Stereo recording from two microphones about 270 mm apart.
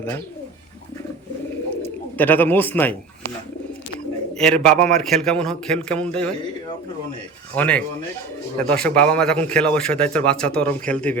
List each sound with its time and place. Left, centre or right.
1.8 s speech: centre
4.4 s a man's voice: centre
7.5 s a man's voice: centre